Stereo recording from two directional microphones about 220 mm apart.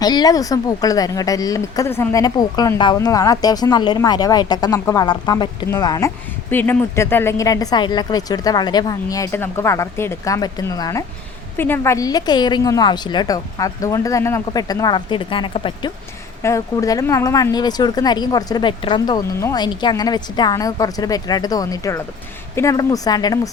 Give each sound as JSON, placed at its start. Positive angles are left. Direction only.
{"t": 0.0, "sound": "speech", "side_deg": 20}